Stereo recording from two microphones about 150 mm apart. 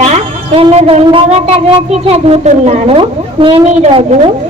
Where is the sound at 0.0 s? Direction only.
45° right (ahead or behind).